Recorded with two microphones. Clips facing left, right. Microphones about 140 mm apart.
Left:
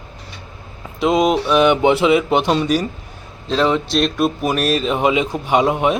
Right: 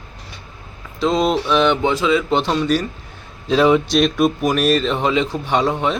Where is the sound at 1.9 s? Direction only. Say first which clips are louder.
Left 3 dB; 20° left (ahead or behind).